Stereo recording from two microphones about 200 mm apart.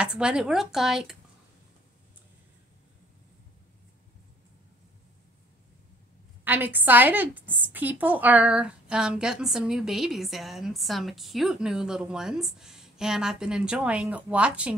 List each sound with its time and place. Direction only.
0.0 s a woman's voice: 5° right (ahead or behind)
6.4 s a woman's voice: 10° right (ahead or behind)